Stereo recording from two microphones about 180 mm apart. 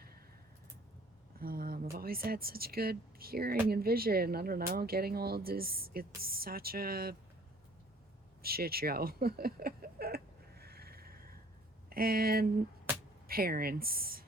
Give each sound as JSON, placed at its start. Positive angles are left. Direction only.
{"t": 1.4, "sound": "speech", "side_deg": -55}
{"t": 8.4, "sound": "a sound", "side_deg": -55}
{"t": 11.9, "sound": "speech", "side_deg": -55}